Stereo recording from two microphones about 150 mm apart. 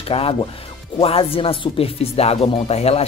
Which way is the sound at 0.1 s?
35° left (ahead or behind).